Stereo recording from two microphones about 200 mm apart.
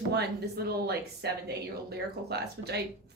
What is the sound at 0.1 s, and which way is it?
A woman's voice, 55° right (ahead or behind).